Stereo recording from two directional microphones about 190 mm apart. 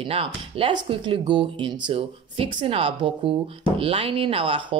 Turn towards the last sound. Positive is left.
turn(degrees=-30)  # may be behind; listen again after turning